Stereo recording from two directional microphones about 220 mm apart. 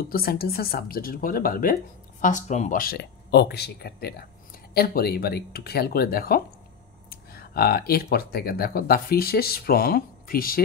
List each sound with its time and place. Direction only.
0.0 s speech: 45° left (ahead or behind)